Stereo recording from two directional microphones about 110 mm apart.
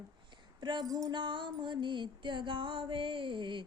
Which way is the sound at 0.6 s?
40° right (ahead or behind).